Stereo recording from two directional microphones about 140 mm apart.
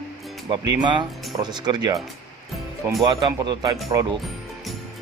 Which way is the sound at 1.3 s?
30° right (ahead or behind).